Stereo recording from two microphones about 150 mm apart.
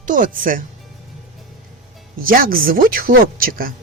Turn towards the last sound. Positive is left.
turn(degrees=-75)  # may be behind; listen again after turning